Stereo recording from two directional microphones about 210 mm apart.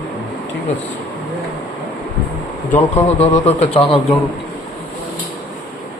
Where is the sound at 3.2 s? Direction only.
30° left (ahead or behind).